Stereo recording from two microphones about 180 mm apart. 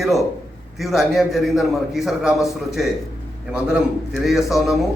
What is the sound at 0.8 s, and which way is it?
A man's voice, centre (ahead or behind).